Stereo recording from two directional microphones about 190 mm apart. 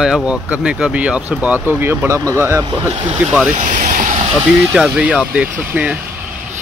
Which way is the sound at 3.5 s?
40° right (ahead or behind).